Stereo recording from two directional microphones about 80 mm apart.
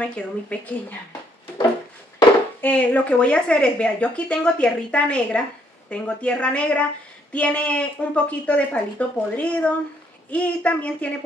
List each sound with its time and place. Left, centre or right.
0.0 s speech: centre
2.6 s speech: centre